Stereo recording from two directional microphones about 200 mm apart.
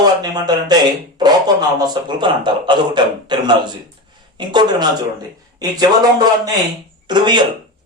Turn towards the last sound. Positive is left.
turn(degrees=-20)  # may be behind; listen again after turning